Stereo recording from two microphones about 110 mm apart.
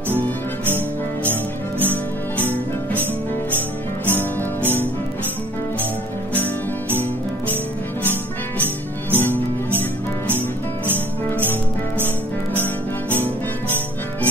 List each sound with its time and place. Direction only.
4.1 s music: 15° left (ahead or behind)
9.1 s music: 15° left (ahead or behind)
12.5 s music: 15° left (ahead or behind)